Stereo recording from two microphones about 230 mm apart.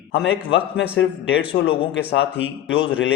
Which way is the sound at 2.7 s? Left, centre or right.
Left.